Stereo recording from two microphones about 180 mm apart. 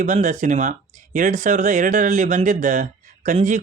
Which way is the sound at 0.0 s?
45° right (ahead or behind).